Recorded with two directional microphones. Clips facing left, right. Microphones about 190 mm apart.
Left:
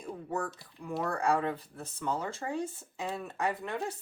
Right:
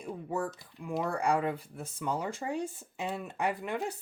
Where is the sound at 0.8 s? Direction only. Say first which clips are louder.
Right 1 dB; 10° right (ahead or behind).